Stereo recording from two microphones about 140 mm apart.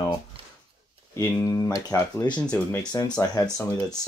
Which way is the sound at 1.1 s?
20° left (ahead or behind).